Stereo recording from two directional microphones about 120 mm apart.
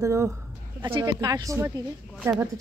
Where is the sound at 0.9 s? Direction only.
35° right (ahead or behind).